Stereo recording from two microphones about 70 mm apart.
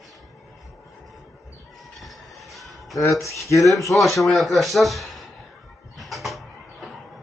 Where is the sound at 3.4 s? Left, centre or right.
Left.